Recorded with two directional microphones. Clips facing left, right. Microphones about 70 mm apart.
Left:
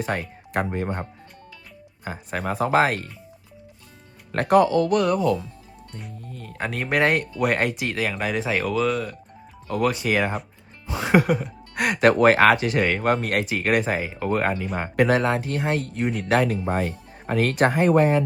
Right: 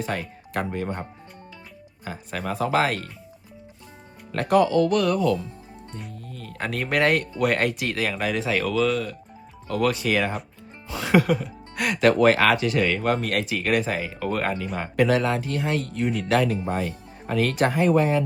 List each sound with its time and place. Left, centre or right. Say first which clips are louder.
0.1 s speech: left 2 dB; left
2.0 s speech: left 2 dB; left
4.3 s speech: left 2 dB; left
4.9 s speech: left 1 dB; centre
10.8 s music: left 1 dB; centre
11.9 s speech: left 1 dB; left
14.9 s speech: left 1 dB; left